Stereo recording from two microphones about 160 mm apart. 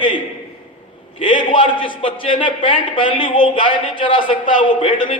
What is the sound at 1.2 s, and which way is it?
A man's voice, 30° left (ahead or behind).